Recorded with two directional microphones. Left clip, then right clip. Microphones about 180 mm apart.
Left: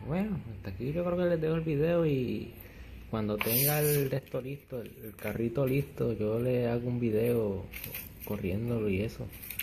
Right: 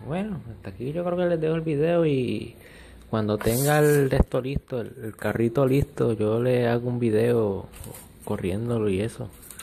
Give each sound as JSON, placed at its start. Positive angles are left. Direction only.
{"t": 0.1, "sound": "speech", "side_deg": -10}
{"t": 3.6, "sound": "speech", "side_deg": -35}
{"t": 8.6, "sound": "speech", "side_deg": -40}